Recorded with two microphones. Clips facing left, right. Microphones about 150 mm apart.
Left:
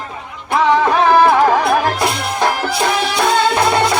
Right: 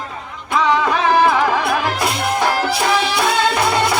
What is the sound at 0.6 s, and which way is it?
Music, 50° left (ahead or behind).